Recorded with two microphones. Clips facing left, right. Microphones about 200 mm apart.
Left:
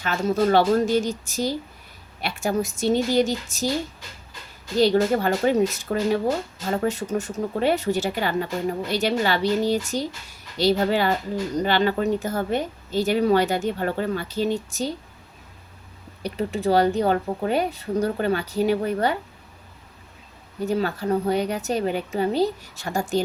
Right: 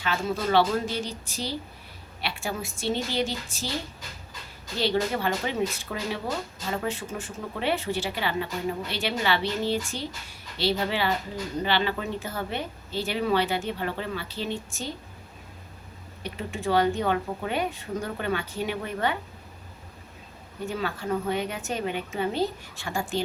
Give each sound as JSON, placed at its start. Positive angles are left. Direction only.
{"t": 0.0, "sound": "a woman's voice", "side_deg": 45}
{"t": 4.8, "sound": "a woman's voice", "side_deg": 45}
{"t": 16.2, "sound": "speech", "side_deg": 35}
{"t": 20.7, "sound": "speech", "side_deg": 40}